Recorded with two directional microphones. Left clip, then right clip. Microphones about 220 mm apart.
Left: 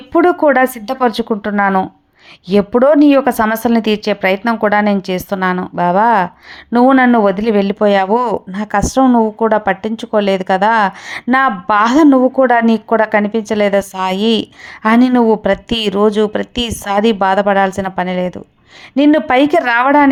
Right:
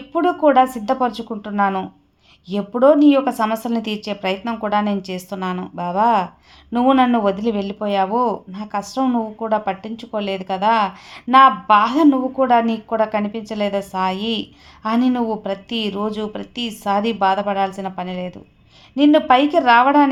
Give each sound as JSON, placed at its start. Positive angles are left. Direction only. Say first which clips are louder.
{"t": 0.1, "sound": "speech", "louder": "left 5 dB", "side_deg": 30}